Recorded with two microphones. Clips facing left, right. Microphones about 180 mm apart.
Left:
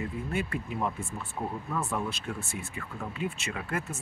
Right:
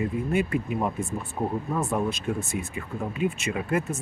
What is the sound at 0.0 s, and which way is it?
Speech, 20° right (ahead or behind).